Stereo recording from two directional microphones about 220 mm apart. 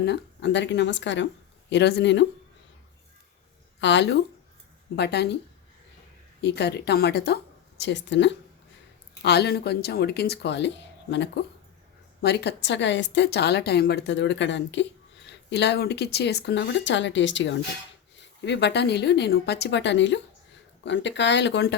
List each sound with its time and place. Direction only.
0.0 s a woman's voice: 50° left (ahead or behind)
3.8 s a woman's voice: 55° left (ahead or behind)
6.4 s a woman's voice: 50° left (ahead or behind)